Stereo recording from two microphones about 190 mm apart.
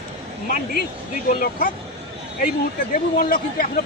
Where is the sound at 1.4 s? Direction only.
50° left (ahead or behind).